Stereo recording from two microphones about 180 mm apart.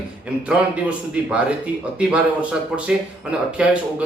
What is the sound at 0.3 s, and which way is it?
Speech, 5° right (ahead or behind).